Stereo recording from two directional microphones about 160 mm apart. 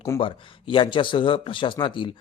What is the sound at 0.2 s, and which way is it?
Speech, 35° left (ahead or behind).